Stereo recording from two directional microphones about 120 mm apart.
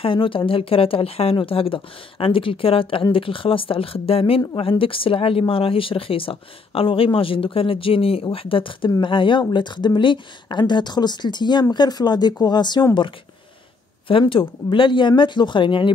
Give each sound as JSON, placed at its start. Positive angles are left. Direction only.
{"t": 0.0, "sound": "speech", "side_deg": 45}
{"t": 14.2, "sound": "speech", "side_deg": 45}